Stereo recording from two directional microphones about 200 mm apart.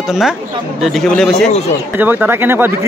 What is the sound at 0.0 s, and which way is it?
A man's voice, centre (ahead or behind).